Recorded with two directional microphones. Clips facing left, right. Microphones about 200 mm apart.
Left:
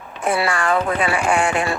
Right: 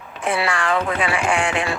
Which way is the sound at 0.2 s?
40° left (ahead or behind).